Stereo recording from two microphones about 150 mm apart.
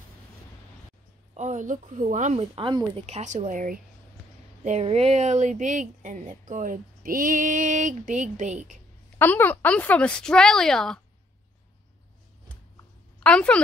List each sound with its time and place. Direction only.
1.3 s speech: 55° right (ahead or behind)
2.5 s speech: 35° right (ahead or behind)
3.2 s speech: 50° right (ahead or behind)
4.6 s speech: 45° right (ahead or behind)
9.2 s speech: 10° left (ahead or behind)
13.2 s a woman's voice: 5° left (ahead or behind)